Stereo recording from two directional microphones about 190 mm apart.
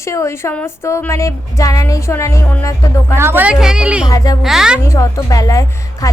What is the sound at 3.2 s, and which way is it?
Speech, 10° right (ahead or behind).